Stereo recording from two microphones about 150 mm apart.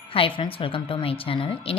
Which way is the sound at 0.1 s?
35° left (ahead or behind).